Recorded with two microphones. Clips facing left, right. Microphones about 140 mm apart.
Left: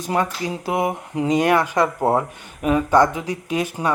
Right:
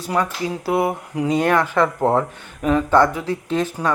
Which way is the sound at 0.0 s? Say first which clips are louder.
Even; 20° left (ahead or behind).